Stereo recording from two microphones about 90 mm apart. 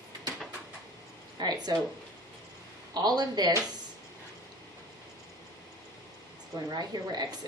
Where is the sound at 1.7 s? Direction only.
45° right (ahead or behind).